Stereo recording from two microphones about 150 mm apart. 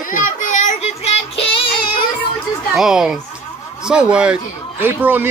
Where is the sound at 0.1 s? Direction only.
60° left (ahead or behind); by 1.4 s 45° left (ahead or behind).